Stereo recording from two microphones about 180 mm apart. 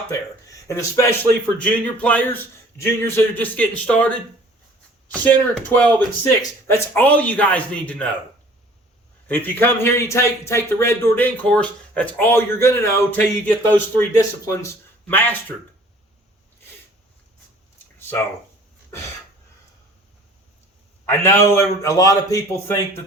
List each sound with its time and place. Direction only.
0.1 s speech: 15° left (ahead or behind)
1.5 s a man's voice: 10° left (ahead or behind)
5.1 s a man's voice: 10° left (ahead or behind)
9.2 s a man's voice: 10° left (ahead or behind)
18.0 s a sound: 10° left (ahead or behind)
21.1 s a man's voice: 15° left (ahead or behind)